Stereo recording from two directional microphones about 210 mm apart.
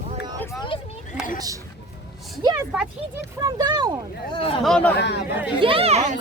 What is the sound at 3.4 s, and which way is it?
Speech, 20° right (ahead or behind).